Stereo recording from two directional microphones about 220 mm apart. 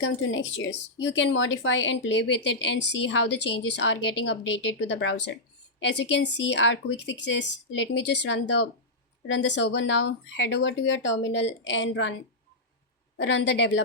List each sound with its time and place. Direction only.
0.0 s speech: 60° left (ahead or behind)
13.1 s speech: 55° left (ahead or behind)